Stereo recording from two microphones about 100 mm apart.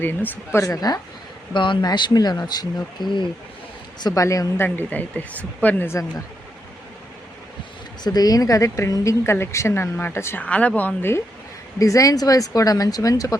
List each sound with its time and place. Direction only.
0.0 s speech: 20° left (ahead or behind)
0.6 s speech: 40° left (ahead or behind)
1.5 s speech: 55° left (ahead or behind)
4.0 s speech: 35° left (ahead or behind)
8.0 s speech: 40° left (ahead or behind)
10.4 s a woman's voice: 15° left (ahead or behind)
11.8 s speech: 35° left (ahead or behind)